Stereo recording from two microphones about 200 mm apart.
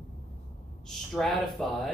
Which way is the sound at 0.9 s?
Centre (ahead or behind).